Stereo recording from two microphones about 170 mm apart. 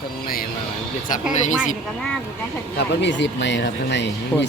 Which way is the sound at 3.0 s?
90° left.